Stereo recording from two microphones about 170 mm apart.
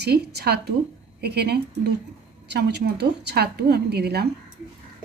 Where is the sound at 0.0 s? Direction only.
75° right (ahead or behind).